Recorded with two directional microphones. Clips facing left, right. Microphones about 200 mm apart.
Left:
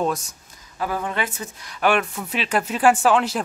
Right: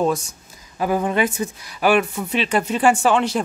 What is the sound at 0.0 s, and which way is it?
Speech, centre (ahead or behind).